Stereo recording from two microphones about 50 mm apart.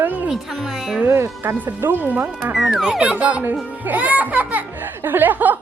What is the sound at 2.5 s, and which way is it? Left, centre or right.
Speech, centre.